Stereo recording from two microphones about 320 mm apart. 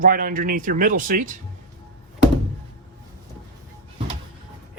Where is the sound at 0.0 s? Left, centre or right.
Right.